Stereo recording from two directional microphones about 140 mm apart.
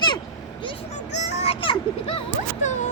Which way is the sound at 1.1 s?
50° left (ahead or behind).